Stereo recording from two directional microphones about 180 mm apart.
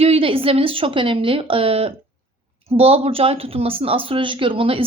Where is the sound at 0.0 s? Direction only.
30° right (ahead or behind).